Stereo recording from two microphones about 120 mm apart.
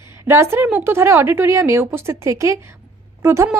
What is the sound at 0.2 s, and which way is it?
A woman's voice, 20° right (ahead or behind).